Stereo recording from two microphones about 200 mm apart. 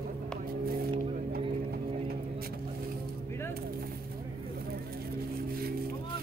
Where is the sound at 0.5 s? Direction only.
50° right (ahead or behind).